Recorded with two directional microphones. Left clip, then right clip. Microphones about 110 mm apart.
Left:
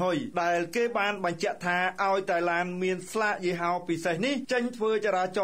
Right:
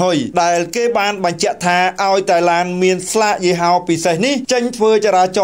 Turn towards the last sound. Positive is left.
turn(degrees=-20)  # may be behind; listen again after turning